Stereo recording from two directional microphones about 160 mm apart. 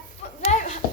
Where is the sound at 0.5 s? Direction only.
50° left (ahead or behind).